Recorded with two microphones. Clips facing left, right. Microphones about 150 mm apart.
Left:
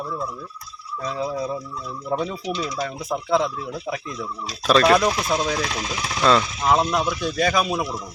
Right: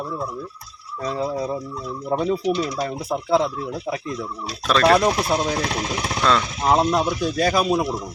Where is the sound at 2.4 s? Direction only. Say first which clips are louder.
Right 5 dB; 65° right (ahead or behind).